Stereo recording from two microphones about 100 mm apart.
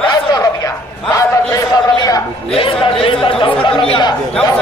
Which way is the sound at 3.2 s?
60° left (ahead or behind).